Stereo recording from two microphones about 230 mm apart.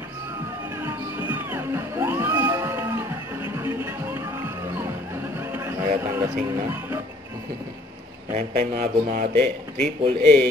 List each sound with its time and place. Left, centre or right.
0.7 s music: centre
8.4 s speech: right
9.4 s a man's voice: centre